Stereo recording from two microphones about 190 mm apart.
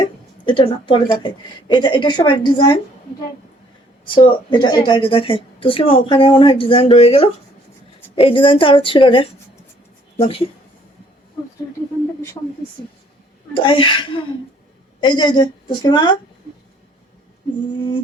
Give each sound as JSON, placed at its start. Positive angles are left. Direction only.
{"t": 0.0, "sound": "a woman's voice", "side_deg": 25}
{"t": 4.0, "sound": "a woman's voice", "side_deg": 25}
{"t": 13.5, "sound": "a woman's voice", "side_deg": 25}